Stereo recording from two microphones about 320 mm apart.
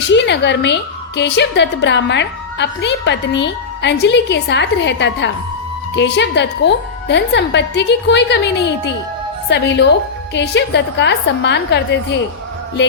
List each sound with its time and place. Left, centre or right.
0.0 s a woman's voice: left